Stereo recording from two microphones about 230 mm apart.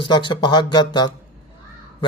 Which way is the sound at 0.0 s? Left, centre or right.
Centre.